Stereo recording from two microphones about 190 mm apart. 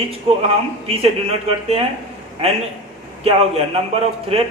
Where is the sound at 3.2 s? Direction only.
30° right (ahead or behind).